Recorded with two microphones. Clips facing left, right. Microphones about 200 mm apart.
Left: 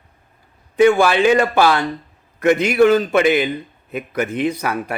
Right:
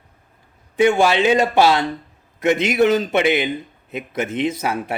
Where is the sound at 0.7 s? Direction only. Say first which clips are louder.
Left 2 dB; 20° right (ahead or behind).